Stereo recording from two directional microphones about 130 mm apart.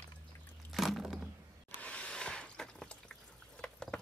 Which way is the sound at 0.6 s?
Centre (ahead or behind).